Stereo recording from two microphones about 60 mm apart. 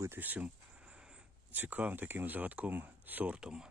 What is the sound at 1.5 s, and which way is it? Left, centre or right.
Speech, right.